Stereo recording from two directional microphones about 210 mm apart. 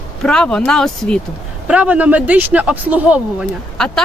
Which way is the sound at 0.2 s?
5° left (ahead or behind).